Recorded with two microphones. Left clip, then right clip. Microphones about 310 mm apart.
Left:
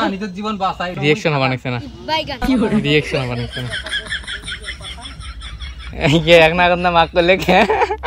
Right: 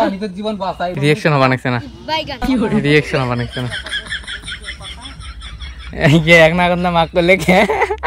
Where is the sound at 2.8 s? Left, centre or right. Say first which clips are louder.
Right 3 dB; centre.